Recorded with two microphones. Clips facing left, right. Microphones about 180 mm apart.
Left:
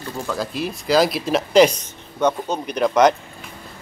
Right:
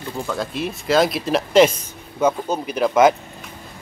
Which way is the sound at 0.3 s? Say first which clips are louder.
Left 1 dB; centre (ahead or behind).